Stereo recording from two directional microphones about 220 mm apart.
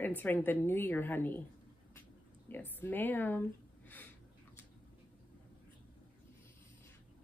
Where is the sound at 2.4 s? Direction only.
10° left (ahead or behind).